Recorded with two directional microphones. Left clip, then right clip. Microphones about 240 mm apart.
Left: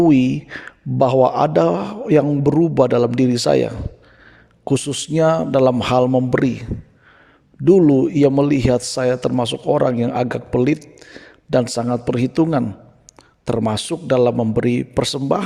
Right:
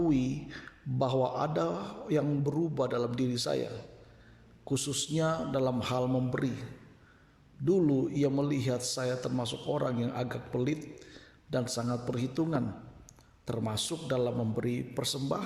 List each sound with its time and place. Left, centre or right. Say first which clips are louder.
0.0 s speech: left 15 dB; left